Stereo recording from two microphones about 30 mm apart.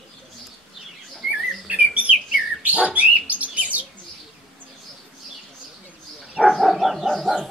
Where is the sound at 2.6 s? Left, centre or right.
Right.